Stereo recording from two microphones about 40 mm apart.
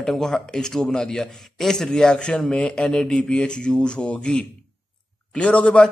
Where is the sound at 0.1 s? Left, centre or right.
Centre.